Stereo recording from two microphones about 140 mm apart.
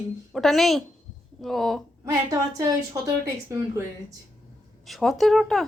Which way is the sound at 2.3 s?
25° right (ahead or behind).